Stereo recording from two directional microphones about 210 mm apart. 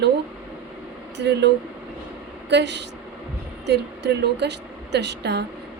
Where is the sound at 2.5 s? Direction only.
55° right (ahead or behind).